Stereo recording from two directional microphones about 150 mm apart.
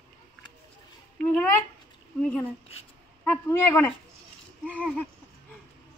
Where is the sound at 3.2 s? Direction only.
15° left (ahead or behind).